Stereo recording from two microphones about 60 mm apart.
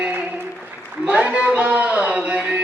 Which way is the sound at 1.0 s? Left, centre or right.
Right.